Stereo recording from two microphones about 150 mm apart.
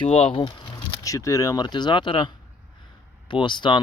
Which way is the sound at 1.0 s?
20° left (ahead or behind).